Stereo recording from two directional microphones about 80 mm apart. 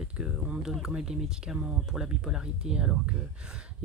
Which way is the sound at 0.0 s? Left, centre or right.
Centre.